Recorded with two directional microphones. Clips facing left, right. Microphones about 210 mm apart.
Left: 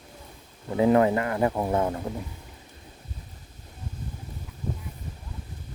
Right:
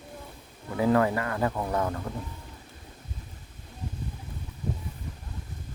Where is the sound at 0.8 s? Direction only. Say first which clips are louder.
Left 3 dB; 20° left (ahead or behind).